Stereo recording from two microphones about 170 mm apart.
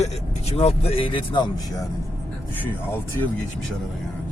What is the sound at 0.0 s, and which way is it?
Speech, 40° left (ahead or behind).